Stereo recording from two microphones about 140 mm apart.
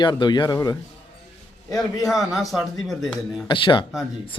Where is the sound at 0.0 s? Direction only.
30° left (ahead or behind).